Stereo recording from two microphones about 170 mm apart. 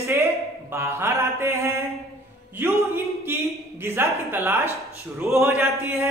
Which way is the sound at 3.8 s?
15° right (ahead or behind).